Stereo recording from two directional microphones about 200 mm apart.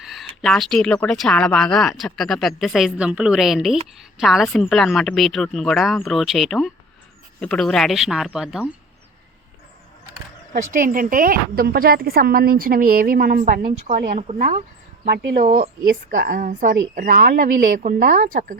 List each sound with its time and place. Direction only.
0.0 s speech: centre (ahead or behind)
10.5 s a woman's voice: 45° right (ahead or behind)
15.0 s a woman's voice: 55° right (ahead or behind)
15.5 s a woman's voice: 45° right (ahead or behind)